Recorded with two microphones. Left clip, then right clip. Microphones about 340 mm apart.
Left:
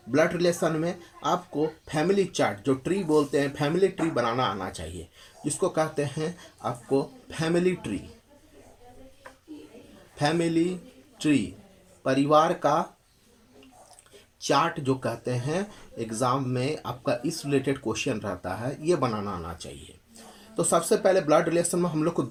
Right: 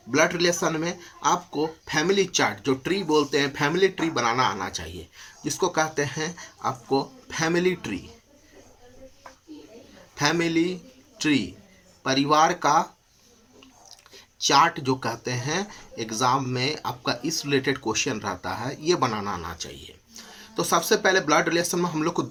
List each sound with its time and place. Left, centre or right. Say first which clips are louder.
0.1 s speech: right 2 dB; right
10.2 s speech: right 2 dB; right
14.3 s speech: right 5 dB; right